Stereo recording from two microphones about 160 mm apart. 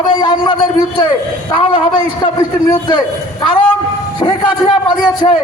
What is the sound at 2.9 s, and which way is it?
A man's voice, 30° left (ahead or behind).